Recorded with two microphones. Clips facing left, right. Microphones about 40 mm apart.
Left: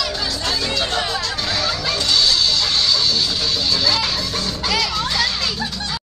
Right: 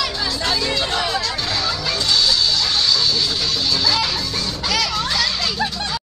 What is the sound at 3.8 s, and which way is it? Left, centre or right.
Music, centre.